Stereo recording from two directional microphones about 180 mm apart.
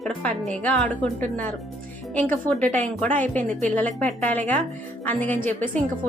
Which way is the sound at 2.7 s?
10° left (ahead or behind).